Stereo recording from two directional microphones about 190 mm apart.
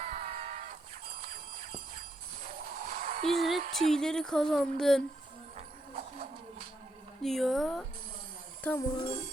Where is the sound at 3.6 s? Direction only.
30° right (ahead or behind).